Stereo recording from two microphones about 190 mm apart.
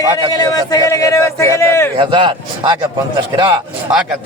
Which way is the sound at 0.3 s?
20° left (ahead or behind).